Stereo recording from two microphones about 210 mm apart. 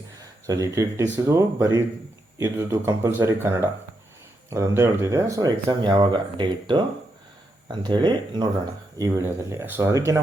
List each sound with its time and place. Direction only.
0.4 s speech: 15° right (ahead or behind)